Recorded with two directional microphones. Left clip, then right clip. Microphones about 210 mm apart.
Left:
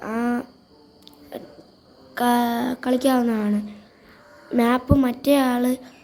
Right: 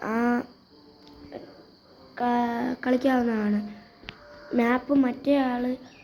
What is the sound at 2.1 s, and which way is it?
A woman's voice, 25° left (ahead or behind).